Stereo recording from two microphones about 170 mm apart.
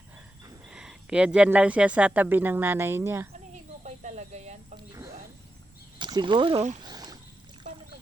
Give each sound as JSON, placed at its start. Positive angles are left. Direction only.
{"t": 0.7, "sound": "a woman's voice", "side_deg": -5}
{"t": 3.8, "sound": "snake", "side_deg": -45}
{"t": 4.9, "sound": "music", "side_deg": -20}
{"t": 6.0, "sound": "speech", "side_deg": -25}
{"t": 6.8, "sound": "rowboat", "side_deg": -25}